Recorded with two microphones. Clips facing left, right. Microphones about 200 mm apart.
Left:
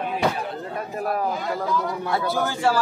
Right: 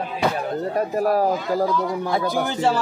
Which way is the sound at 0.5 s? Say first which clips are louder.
Right 8 dB; 40° right (ahead or behind).